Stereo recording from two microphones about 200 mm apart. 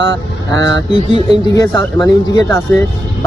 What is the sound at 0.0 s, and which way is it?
Speech, 65° right (ahead or behind).